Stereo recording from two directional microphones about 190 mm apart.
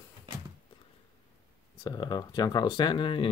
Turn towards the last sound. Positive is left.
turn(degrees=25)  # may be behind; listen again after turning